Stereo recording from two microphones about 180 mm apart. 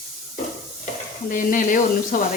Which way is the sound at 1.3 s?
50° left (ahead or behind).